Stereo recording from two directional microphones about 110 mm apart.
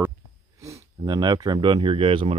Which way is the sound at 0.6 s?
35° right (ahead or behind).